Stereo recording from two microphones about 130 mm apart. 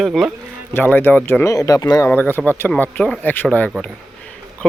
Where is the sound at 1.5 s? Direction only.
25° left (ahead or behind).